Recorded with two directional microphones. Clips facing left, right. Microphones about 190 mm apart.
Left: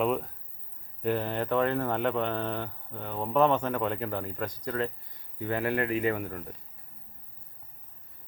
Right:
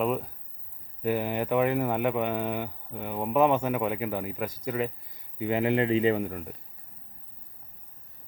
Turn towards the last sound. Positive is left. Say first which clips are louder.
# right 4 dB
turn(degrees=-20)  # may be behind; listen again after turning